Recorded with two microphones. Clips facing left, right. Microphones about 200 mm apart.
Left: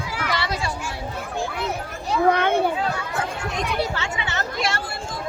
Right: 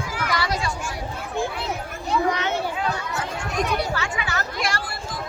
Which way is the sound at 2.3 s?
55° left (ahead or behind).